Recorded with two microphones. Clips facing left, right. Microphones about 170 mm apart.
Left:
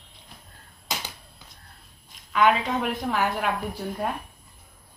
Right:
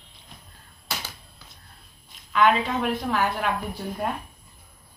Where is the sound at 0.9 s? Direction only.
20° left (ahead or behind).